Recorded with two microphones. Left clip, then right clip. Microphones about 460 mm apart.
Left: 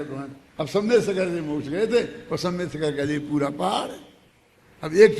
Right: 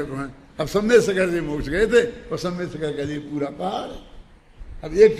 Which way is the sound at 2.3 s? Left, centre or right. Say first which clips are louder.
Even; centre.